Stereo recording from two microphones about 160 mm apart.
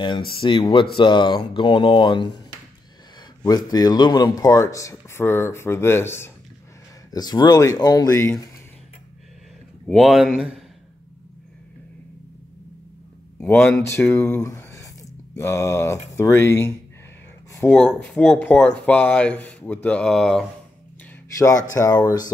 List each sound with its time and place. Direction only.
0.3 s speech: 30° left (ahead or behind)
3.4 s speech: 25° left (ahead or behind)
9.8 s speech: centre (ahead or behind)
13.4 s speech: 10° left (ahead or behind)
13.8 s speech: 15° left (ahead or behind)
17.6 s speech: 5° left (ahead or behind)
21.4 s speech: 20° left (ahead or behind)